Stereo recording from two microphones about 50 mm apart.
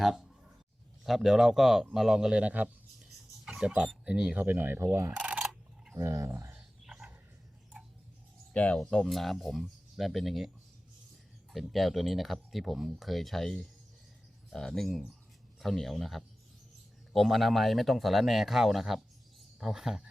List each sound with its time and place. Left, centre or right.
0.0 s speech: centre
2.3 s a man's voice: right
3.0 s a sound: centre
4.4 s speech: right
5.1 s camera: right
6.0 s speech: right
8.5 s speech: left
9.0 s speech: centre
11.5 s speech: centre